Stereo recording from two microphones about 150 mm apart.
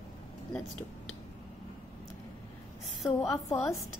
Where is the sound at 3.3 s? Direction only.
20° left (ahead or behind).